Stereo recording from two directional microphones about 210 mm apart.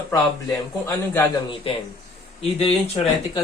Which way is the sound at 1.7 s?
25° left (ahead or behind).